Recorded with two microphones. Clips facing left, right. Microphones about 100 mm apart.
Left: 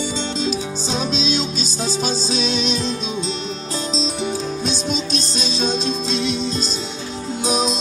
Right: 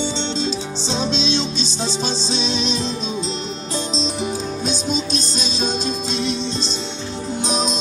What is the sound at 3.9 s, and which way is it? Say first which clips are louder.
Music: left 2 dB; centre (ahead or behind).